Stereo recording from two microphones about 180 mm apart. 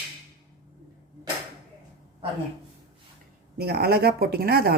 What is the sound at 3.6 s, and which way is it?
Speech, 60° right (ahead or behind).